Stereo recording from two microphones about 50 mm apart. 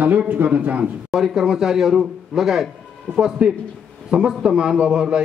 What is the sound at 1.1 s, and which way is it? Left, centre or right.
A man's voice, centre.